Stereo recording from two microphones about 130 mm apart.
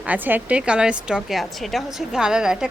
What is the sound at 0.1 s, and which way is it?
A woman's voice, 15° right (ahead or behind).